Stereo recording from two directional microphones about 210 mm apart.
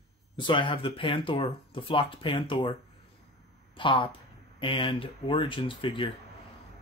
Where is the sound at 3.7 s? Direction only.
25° left (ahead or behind).